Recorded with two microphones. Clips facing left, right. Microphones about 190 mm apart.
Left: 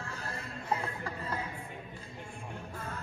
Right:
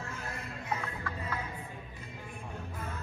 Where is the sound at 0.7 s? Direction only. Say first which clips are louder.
Left 1 dB; 30° left (ahead or behind).